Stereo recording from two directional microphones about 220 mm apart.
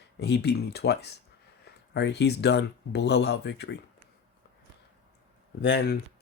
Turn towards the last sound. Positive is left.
turn(degrees=50)  # may be behind; listen again after turning